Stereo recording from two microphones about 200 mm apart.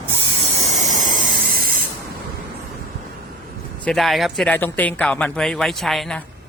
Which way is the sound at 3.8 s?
Centre (ahead or behind).